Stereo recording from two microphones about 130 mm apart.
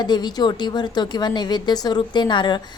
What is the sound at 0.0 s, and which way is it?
A woman's voice, 35° left (ahead or behind).